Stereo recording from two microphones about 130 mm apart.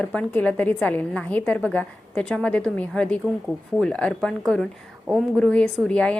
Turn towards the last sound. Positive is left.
turn(degrees=10)  # may be behind; listen again after turning